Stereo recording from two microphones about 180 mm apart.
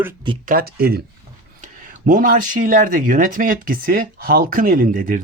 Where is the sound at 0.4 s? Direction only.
55° right (ahead or behind).